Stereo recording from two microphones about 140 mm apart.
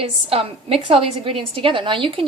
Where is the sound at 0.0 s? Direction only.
45° right (ahead or behind).